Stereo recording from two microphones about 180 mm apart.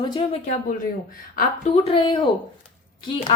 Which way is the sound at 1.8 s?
30° left (ahead or behind).